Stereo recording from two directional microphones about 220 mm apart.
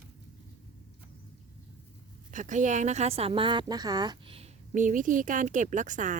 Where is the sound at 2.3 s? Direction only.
35° right (ahead or behind).